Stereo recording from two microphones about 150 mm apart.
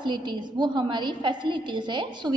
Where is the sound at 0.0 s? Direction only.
30° right (ahead or behind).